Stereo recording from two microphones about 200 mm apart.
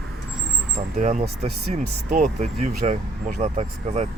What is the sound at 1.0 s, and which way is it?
Speech, 35° right (ahead or behind).